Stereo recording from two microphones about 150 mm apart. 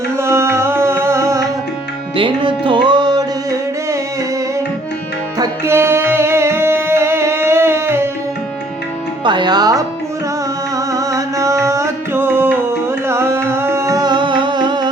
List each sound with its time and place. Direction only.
0.2 s music: 15° right (ahead or behind)
2.1 s music: 35° right (ahead or behind)
5.4 s music: 15° right (ahead or behind)
9.2 s music: 30° right (ahead or behind)